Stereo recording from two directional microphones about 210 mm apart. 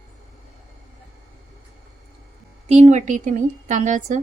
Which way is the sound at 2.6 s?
30° right (ahead or behind).